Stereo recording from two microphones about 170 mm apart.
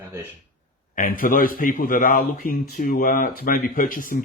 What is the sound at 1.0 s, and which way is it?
Speech, 55° left (ahead or behind).